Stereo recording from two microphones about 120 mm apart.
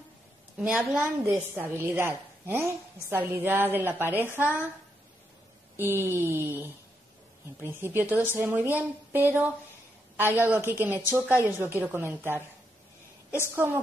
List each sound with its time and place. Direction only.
0.6 s a woman's voice: 10° right (ahead or behind)
1.5 s a woman's voice: 20° right (ahead or behind)
5.8 s a woman's voice: 20° right (ahead or behind)